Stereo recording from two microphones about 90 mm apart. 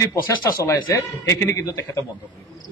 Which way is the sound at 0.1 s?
40° left (ahead or behind).